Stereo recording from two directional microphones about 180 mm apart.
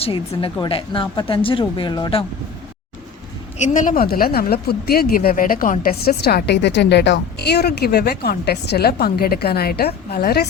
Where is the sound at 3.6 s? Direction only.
45° left (ahead or behind).